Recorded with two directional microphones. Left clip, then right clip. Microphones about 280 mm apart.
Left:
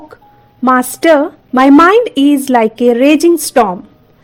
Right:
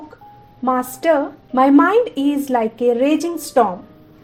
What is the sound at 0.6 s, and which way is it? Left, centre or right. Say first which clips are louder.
A woman's voice: left 8 dB; left.